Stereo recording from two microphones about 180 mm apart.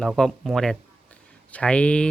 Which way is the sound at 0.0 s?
Centre (ahead or behind).